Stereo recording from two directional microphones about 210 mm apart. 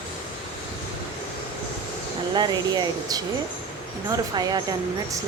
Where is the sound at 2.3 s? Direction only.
20° right (ahead or behind).